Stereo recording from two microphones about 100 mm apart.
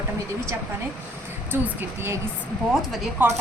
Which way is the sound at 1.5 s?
25° right (ahead or behind).